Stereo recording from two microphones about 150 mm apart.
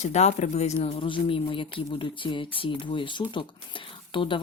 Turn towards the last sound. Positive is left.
turn(degrees=35)  # may be behind; listen again after turning